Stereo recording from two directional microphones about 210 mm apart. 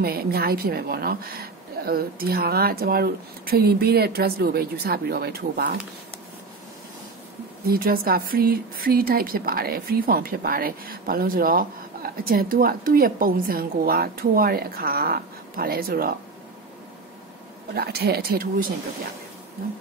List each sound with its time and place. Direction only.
0.0 s speech: 45° right (ahead or behind)
7.6 s speech: 45° right (ahead or behind)
17.7 s speech: 50° right (ahead or behind)